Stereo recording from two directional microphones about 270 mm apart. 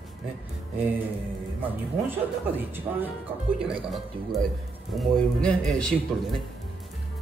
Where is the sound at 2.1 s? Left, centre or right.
Centre.